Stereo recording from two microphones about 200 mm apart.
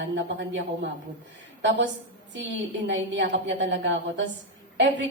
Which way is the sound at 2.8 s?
60° right (ahead or behind).